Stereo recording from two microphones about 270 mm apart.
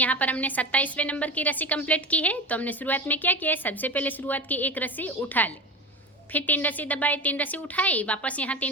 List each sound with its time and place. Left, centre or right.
0.0 s a woman's voice: centre